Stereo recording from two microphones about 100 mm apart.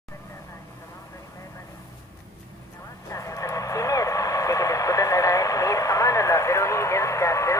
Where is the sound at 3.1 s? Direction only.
35° left (ahead or behind).